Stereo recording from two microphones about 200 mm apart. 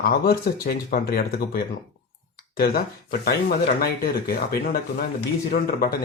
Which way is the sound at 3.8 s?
50° left (ahead or behind).